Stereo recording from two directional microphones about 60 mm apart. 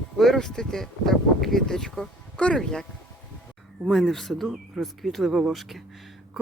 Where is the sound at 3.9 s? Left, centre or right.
Centre.